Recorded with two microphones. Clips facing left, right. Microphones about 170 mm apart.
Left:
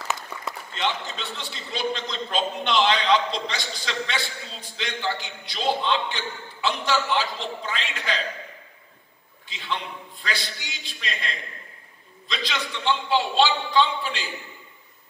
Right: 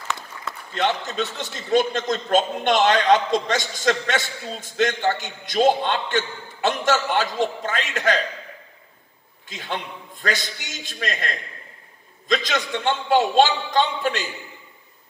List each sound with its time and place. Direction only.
0.7 s a man's voice: 45° right (ahead or behind)
9.5 s a man's voice: 45° right (ahead or behind)